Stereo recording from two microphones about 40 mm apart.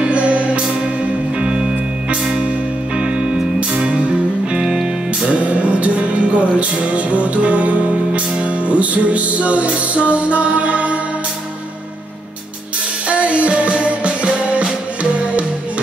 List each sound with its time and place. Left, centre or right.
0.0 s music: right
1.4 s music: right
3.0 s music: right
5.4 s music: right
13.1 s music: right